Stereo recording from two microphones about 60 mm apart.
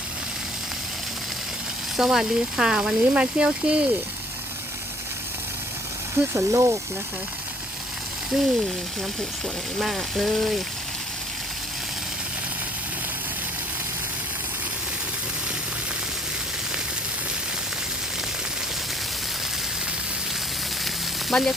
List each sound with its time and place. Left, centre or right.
2.0 s speech: centre
6.3 s speech: right
8.3 s speech: centre
9.8 s speech: centre
20.8 s frying: centre